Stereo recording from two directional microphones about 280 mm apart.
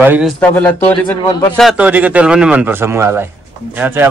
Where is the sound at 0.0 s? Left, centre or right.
Centre.